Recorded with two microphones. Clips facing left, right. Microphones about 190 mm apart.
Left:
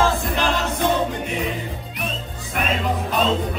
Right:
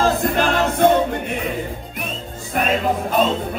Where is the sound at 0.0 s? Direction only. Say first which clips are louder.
Right 3 dB; 55° right (ahead or behind).